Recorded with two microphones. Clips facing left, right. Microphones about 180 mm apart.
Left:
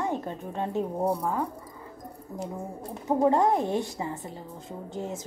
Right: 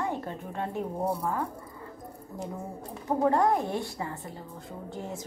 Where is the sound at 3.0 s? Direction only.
20° left (ahead or behind).